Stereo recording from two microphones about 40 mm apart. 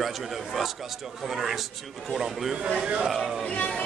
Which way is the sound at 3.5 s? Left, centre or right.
Left.